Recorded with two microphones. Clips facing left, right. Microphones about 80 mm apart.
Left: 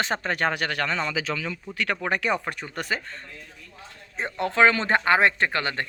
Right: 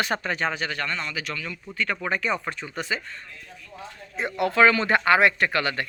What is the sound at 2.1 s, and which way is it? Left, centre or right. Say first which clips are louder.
Speech: left 2 dB; left.